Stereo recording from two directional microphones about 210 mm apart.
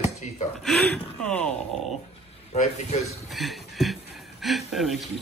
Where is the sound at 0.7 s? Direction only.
5° left (ahead or behind).